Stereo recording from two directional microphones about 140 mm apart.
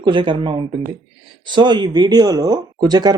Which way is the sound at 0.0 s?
35° right (ahead or behind).